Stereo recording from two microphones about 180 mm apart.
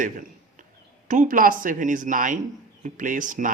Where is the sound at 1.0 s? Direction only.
45° right (ahead or behind).